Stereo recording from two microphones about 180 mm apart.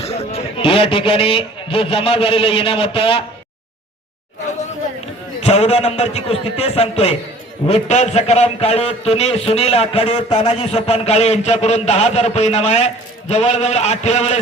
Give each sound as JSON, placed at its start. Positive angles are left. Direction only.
{"t": 0.0, "sound": "a man's voice", "side_deg": 35}
{"t": 5.4, "sound": "a man's voice", "side_deg": 35}